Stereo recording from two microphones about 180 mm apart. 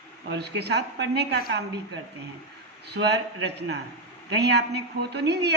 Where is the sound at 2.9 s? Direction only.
70° right (ahead or behind).